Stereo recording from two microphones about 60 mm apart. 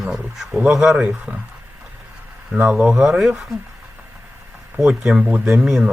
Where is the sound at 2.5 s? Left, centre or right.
Centre.